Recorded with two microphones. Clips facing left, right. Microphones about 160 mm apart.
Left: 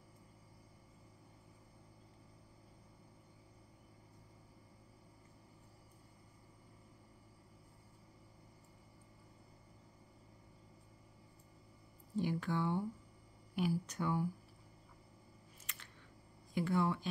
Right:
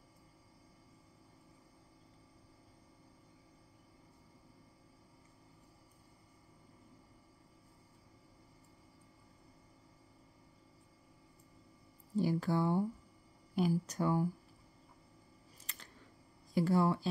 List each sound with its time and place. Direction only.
12.2 s speech: 35° right (ahead or behind)
15.6 s camera: 35° right (ahead or behind)
16.5 s speech: 40° right (ahead or behind)